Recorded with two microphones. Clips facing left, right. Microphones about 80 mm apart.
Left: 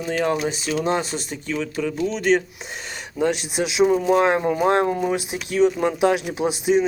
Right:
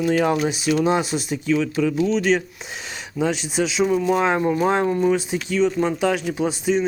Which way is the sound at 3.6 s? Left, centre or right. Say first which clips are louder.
Left 1 dB; centre.